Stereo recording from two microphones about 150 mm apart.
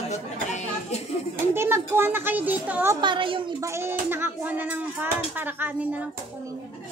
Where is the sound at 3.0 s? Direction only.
35° right (ahead or behind).